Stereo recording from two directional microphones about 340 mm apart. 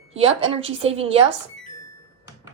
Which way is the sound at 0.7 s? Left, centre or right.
Centre.